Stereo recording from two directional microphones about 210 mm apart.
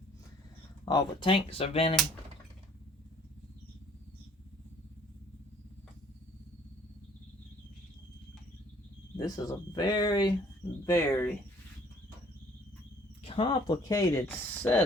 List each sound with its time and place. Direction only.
0.9 s speech: 20° left (ahead or behind)
9.1 s speech: 15° left (ahead or behind)
13.2 s speech: 25° left (ahead or behind)